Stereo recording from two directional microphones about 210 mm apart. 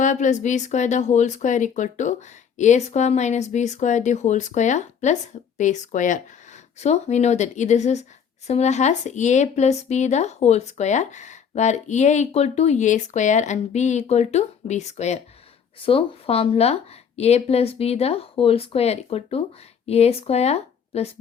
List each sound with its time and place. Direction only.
0.0 s a woman's voice: 35° left (ahead or behind)